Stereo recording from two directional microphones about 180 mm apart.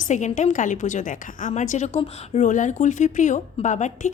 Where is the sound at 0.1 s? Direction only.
40° left (ahead or behind).